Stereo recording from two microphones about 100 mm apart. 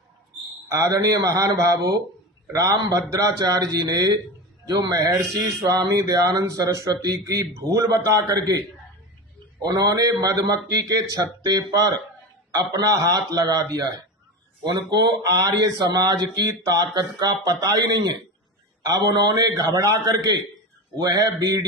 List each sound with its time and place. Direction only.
0.7 s speech: 35° right (ahead or behind)